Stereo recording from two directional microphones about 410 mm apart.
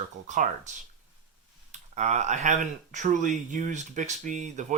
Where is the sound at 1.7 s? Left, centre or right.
Centre.